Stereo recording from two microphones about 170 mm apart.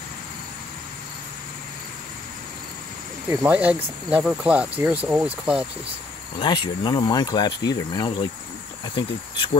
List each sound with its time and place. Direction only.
3.3 s speech: 10° right (ahead or behind)
6.4 s speech: 25° left (ahead or behind)